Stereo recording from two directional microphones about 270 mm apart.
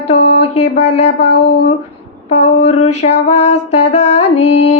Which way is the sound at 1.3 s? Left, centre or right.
Left.